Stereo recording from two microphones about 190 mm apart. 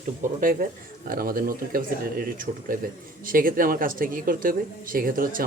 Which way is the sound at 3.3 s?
45° right (ahead or behind).